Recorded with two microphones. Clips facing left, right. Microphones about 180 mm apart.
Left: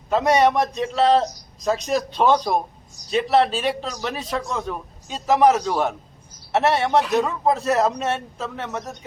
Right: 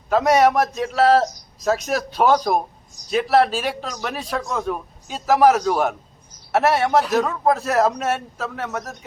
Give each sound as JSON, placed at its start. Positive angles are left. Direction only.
{"t": 0.1, "sound": "a man's voice", "side_deg": 0}